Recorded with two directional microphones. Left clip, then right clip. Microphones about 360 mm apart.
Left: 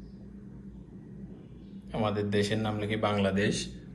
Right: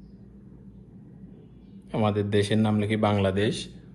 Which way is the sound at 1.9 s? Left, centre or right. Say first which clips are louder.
Right 4 dB; centre.